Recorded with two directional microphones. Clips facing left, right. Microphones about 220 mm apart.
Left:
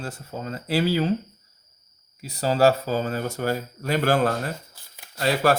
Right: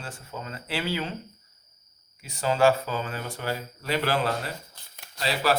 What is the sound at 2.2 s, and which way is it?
Speech, 35° left (ahead or behind).